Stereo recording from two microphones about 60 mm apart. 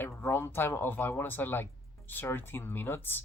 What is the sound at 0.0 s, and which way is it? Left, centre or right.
Speech, left.